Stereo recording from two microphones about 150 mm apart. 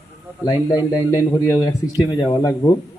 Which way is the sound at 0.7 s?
15° right (ahead or behind).